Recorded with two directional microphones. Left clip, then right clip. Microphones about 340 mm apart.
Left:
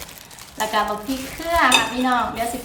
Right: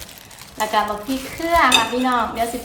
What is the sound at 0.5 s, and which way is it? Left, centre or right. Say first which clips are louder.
A woman's voice: right 2 dB; centre.